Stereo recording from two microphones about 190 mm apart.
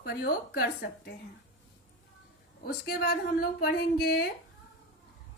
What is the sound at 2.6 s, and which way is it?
A woman's voice, 55° left (ahead or behind).